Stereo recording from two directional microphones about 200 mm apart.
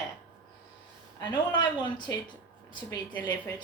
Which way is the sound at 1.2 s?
20° left (ahead or behind).